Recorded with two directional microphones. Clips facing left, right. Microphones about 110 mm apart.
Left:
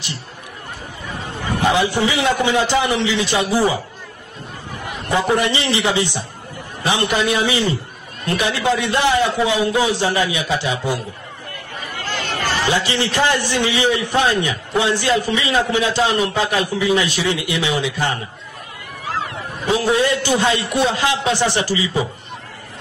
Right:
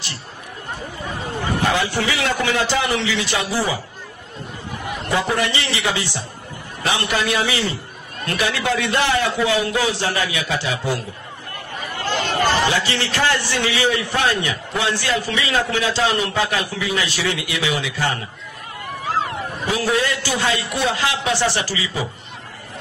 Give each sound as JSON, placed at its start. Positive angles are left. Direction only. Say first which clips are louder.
{"t": 1.6, "sound": "a man's voice", "louder": "left 5 dB", "side_deg": 20}
{"t": 5.1, "sound": "a man's voice", "louder": "left 3 dB", "side_deg": 20}
{"t": 12.7, "sound": "a man's voice", "louder": "left 3 dB", "side_deg": 20}
{"t": 19.7, "sound": "a man's voice", "louder": "left 4 dB", "side_deg": 20}